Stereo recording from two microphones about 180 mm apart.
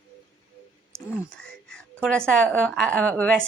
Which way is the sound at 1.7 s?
5° left (ahead or behind).